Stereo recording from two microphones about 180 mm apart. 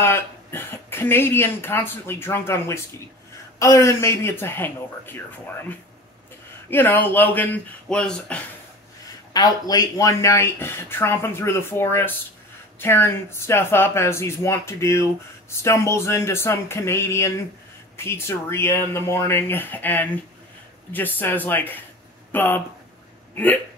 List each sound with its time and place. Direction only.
0.0 s speech: 15° left (ahead or behind)
9.3 s speech: 20° left (ahead or behind)